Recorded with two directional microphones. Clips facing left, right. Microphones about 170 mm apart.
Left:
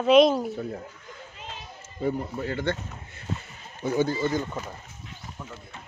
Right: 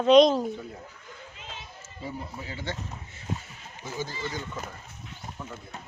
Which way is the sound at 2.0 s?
55° left (ahead or behind).